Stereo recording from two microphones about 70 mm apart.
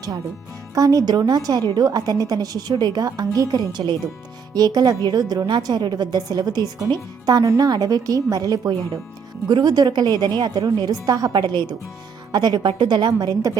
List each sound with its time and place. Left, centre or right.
0.7 s a woman's voice: right
4.5 s a woman's voice: right
7.4 s a woman's voice: right
9.5 s a woman's voice: right